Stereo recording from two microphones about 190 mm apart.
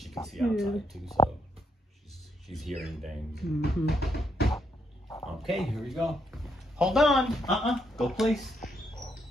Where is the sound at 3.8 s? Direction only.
60° left (ahead or behind).